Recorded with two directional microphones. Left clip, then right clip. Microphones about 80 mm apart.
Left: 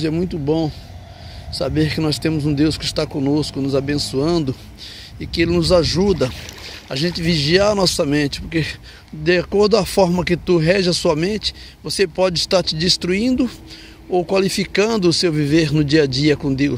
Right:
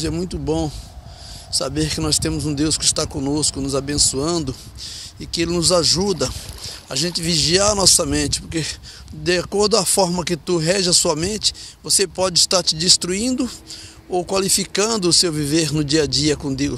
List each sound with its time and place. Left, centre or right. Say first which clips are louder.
0.0 s speech: left 3 dB; right
0.5 s speech: left 2 dB; right
1.5 s speech: left 2 dB; right
6.9 s speech: left 1 dB; right